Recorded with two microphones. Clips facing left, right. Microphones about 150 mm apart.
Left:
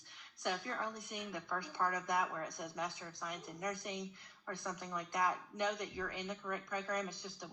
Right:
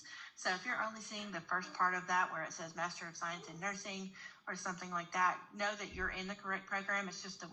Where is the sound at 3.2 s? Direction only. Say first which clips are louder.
Left 3 dB; 20° left (ahead or behind).